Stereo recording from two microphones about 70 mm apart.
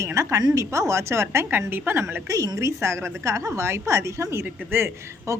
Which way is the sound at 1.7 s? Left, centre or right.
Right.